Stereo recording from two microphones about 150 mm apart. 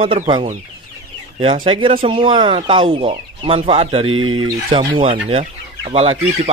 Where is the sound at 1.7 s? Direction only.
35° right (ahead or behind).